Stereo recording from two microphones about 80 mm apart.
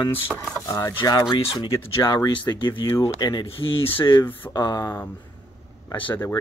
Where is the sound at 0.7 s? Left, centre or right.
Left.